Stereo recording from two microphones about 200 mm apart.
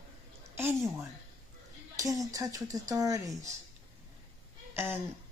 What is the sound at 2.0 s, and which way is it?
A man's voice, 15° right (ahead or behind).